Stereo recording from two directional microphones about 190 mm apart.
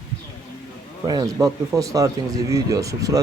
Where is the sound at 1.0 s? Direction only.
20° right (ahead or behind).